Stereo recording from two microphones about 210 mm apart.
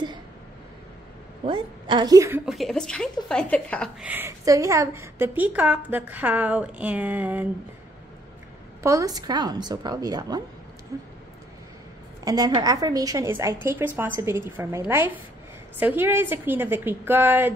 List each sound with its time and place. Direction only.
1.4 s a woman's voice: 25° right (ahead or behind)
2.4 s a woman's voice: centre (ahead or behind)
4.0 s a woman's voice: 10° right (ahead or behind)
8.8 s a woman's voice: 15° right (ahead or behind)
12.3 s a woman's voice: 20° right (ahead or behind)